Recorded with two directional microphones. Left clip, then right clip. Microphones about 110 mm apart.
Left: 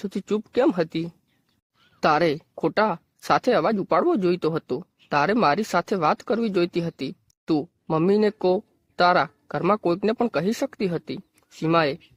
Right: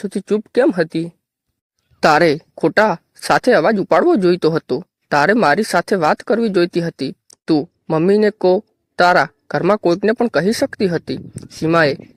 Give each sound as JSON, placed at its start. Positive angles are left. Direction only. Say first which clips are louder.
{"t": 0.0, "sound": "speech", "louder": "right 8 dB", "side_deg": -30}
{"t": 2.0, "sound": "speech", "louder": "right 8 dB", "side_deg": -50}